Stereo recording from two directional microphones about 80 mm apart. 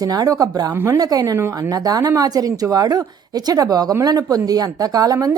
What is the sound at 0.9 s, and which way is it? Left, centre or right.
A woman's voice, right.